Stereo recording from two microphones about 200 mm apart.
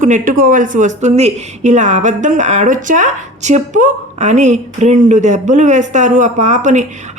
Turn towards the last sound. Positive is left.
turn(degrees=-35)  # may be behind; listen again after turning